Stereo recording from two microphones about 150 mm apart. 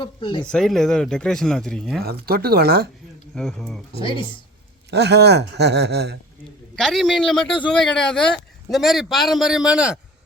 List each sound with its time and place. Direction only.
0.0 s speech: 35° left (ahead or behind)
0.5 s speech: 5° left (ahead or behind)
2.2 s speech: 90° right
3.3 s speech: 5° left (ahead or behind)
4.9 s speech: 90° right
6.7 s speech: centre (ahead or behind)